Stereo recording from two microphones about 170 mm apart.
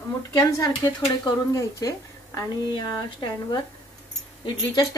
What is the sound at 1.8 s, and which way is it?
A woman's voice, 20° left (ahead or behind).